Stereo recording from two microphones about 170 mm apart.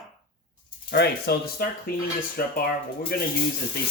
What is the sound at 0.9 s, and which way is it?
Speech, 70° left (ahead or behind).